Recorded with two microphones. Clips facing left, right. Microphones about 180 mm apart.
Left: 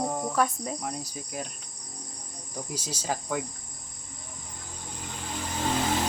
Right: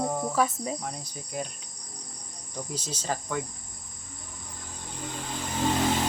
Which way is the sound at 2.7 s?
10° left (ahead or behind).